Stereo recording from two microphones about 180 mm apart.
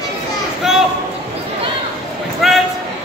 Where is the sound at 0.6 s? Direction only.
Centre (ahead or behind).